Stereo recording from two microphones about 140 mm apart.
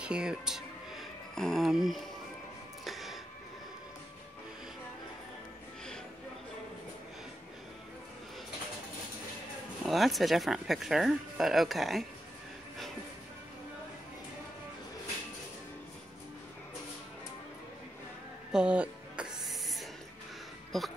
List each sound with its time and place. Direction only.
0.0 s music: 5° right (ahead or behind)
9.8 s speech: centre (ahead or behind)
18.5 s music: 5° right (ahead or behind)